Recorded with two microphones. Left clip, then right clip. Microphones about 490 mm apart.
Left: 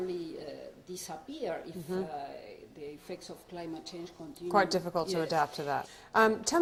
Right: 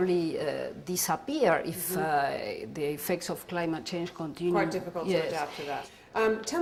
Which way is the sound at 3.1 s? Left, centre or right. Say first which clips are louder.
Right 12 dB; right.